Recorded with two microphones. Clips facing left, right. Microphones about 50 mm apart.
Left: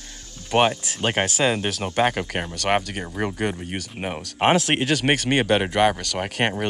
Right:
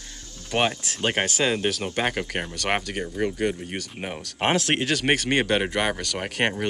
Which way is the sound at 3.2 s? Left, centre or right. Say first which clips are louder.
Even; centre.